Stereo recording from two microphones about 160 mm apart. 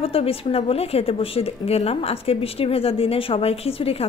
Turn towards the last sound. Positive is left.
turn(degrees=35)  # may be behind; listen again after turning